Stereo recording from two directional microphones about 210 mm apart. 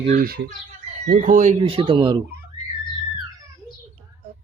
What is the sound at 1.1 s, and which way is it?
Speech, 35° right (ahead or behind).